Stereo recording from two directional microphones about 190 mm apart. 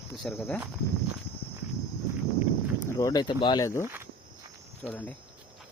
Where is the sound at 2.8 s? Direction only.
20° left (ahead or behind).